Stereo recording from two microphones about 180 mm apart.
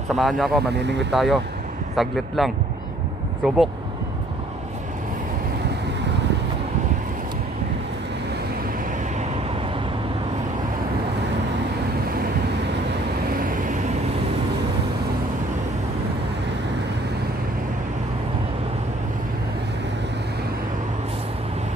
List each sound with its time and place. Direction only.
0.1 s speech: centre (ahead or behind)
13.4 s vehicle: 50° right (ahead or behind)